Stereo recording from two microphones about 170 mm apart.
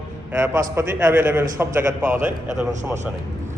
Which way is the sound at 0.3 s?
15° right (ahead or behind).